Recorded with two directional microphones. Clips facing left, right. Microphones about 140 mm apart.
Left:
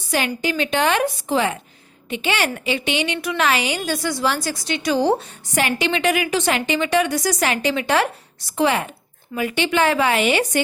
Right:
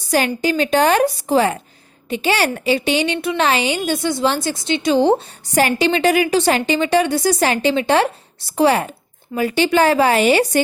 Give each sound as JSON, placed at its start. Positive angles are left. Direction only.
{"t": 0.3, "sound": "a woman's voice", "side_deg": -40}
{"t": 5.5, "sound": "a woman's voice", "side_deg": -35}